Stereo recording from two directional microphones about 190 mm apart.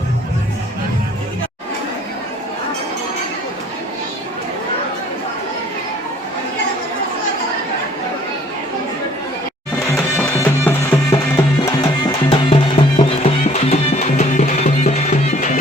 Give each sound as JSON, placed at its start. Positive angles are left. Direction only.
{"t": 9.9, "sound": "music", "side_deg": 10}
{"t": 12.3, "sound": "music", "side_deg": 30}